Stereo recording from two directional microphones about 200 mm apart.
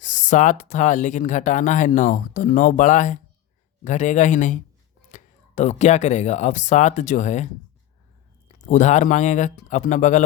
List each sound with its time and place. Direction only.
0.0 s speech: 40° left (ahead or behind)
8.5 s speech: 40° left (ahead or behind)